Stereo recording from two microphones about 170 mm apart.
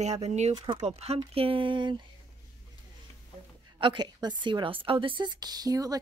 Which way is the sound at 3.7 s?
25° right (ahead or behind).